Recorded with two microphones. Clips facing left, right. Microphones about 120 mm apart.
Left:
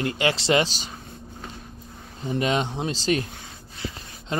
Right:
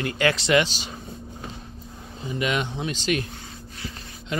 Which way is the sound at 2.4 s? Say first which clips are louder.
Left 2 dB; 30° left (ahead or behind).